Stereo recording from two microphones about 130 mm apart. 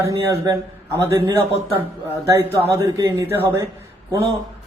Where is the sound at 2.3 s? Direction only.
20° right (ahead or behind).